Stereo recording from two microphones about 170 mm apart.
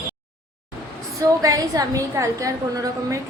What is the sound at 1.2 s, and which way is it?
A woman's voice, 20° right (ahead or behind).